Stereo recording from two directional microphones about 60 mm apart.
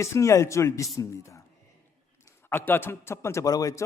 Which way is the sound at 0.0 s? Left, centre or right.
Left.